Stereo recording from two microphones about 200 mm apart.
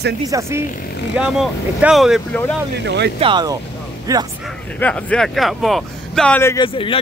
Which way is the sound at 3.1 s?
25° right (ahead or behind).